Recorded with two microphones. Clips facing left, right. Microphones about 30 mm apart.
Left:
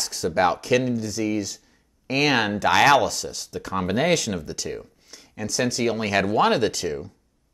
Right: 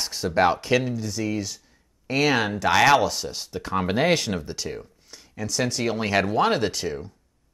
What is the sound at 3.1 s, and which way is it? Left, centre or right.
Speech, centre.